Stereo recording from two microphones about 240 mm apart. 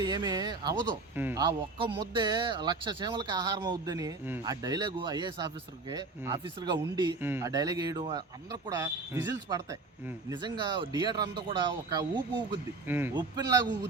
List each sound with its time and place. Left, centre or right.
0.0 s speech: centre